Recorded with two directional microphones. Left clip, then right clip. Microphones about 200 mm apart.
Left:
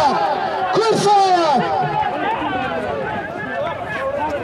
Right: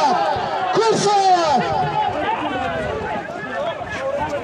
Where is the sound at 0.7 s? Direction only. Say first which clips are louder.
Left 2 dB; 20° left (ahead or behind).